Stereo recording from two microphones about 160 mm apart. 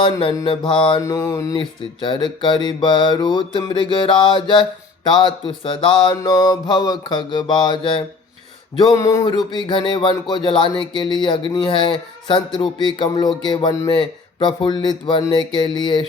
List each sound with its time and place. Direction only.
0.0 s mantra: 30° left (ahead or behind)
1.0 s mantra: 15° left (ahead or behind)